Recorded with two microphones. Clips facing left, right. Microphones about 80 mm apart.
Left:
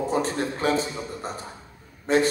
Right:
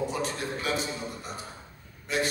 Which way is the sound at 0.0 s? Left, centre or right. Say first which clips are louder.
Left 6 dB; left.